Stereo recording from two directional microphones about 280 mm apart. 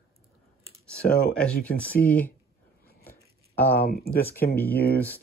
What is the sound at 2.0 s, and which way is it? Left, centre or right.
Speech, left.